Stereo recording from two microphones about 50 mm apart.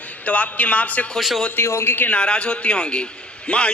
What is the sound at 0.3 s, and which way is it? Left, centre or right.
Speech, left.